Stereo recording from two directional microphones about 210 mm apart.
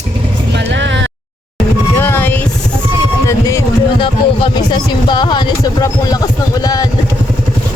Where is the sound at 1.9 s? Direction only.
10° left (ahead or behind).